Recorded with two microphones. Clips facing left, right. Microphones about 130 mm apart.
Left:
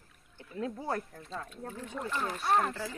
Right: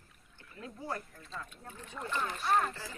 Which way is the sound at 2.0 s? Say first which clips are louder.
Left 1 dB; 5° left (ahead or behind).